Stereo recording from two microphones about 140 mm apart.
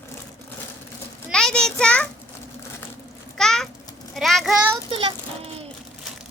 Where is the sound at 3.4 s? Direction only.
5° left (ahead or behind).